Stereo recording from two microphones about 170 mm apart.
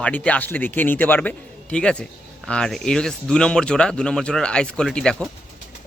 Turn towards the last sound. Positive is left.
turn(degrees=5)  # may be behind; listen again after turning